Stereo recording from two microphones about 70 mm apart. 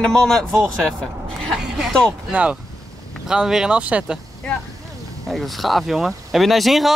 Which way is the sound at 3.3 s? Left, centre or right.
Centre.